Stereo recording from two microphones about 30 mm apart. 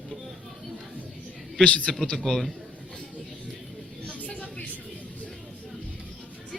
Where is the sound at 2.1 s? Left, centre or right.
Centre.